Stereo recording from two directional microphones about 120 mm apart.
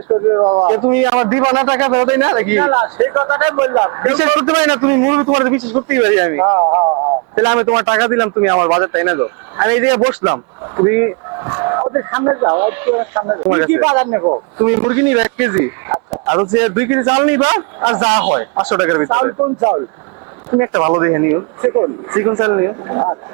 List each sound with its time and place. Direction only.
0.1 s a man's voice: 30° right (ahead or behind)